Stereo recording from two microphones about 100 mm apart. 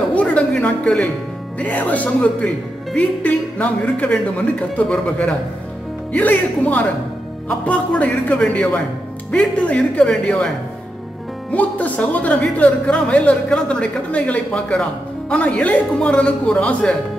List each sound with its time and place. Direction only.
0.1 s a sound: 15° left (ahead or behind)
1.6 s speech: 15° left (ahead or behind)
11.5 s speech: 15° left (ahead or behind)